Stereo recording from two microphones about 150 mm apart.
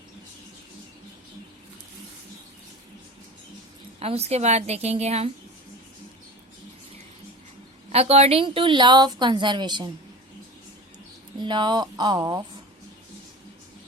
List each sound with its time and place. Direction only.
4.0 s a woman's voice: 45° right (ahead or behind)
7.9 s a woman's voice: 45° right (ahead or behind)
11.3 s speech: 30° right (ahead or behind)